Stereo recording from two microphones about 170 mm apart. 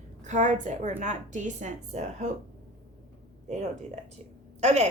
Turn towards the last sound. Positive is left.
turn(degrees=-40)  # may be behind; listen again after turning